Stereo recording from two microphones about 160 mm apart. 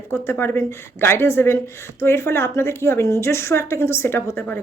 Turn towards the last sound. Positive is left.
turn(degrees=10)  # may be behind; listen again after turning